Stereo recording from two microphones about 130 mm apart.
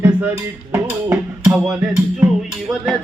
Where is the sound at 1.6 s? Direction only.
5° right (ahead or behind).